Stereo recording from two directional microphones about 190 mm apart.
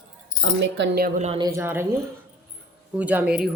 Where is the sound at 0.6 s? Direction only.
70° right (ahead or behind).